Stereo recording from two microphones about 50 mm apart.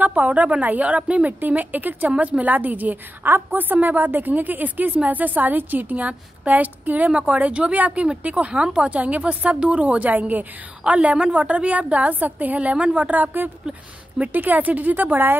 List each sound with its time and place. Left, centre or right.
0.0 s a woman's voice: right